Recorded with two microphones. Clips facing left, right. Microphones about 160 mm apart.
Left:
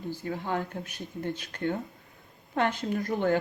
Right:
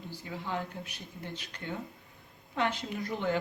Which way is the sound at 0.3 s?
55° left (ahead or behind).